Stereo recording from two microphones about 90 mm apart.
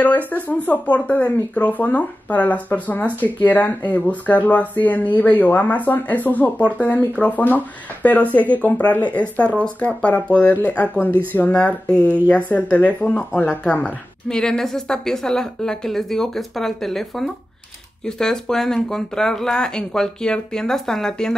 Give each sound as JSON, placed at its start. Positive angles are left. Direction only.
{"t": 0.0, "sound": "speech", "side_deg": 20}